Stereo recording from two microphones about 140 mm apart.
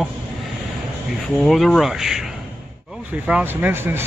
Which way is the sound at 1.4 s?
Centre (ahead or behind).